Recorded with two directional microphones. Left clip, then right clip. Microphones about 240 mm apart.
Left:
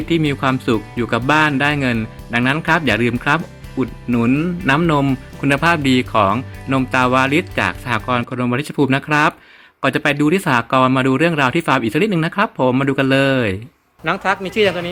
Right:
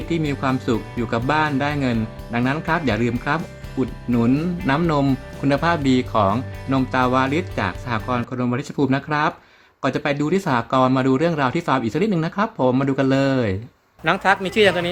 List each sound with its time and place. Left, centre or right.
0.1 s speech: centre
14.0 s a man's voice: centre